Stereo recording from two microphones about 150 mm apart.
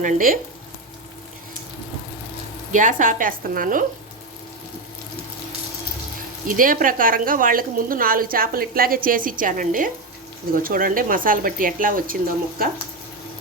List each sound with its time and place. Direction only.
0.0 s a woman's voice: 70° right (ahead or behind)
2.7 s speech: 60° right (ahead or behind)
6.5 s a woman's voice: 65° right (ahead or behind)